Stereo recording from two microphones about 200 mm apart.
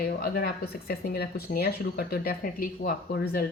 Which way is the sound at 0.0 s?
50° left (ahead or behind).